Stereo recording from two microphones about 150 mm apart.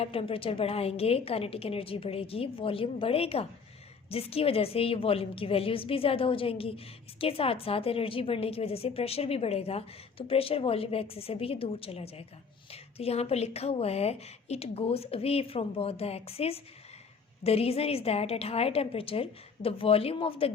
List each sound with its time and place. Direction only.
0.0 s a woman's voice: 40° left (ahead or behind)